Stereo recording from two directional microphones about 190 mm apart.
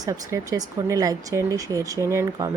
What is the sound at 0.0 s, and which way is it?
A woman's voice, 15° right (ahead or behind).